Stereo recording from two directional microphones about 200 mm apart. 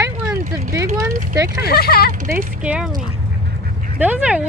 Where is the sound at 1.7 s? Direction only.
50° left (ahead or behind).